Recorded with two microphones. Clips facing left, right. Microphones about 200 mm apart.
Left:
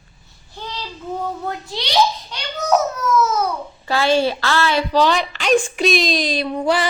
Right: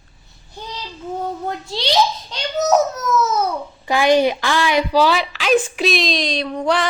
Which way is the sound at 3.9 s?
15° right (ahead or behind).